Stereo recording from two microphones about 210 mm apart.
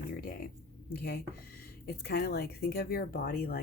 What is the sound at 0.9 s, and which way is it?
Speech, 45° left (ahead or behind).